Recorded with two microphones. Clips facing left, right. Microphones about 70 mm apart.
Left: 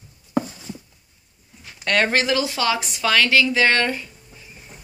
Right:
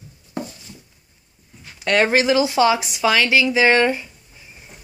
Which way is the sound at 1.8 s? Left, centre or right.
Centre.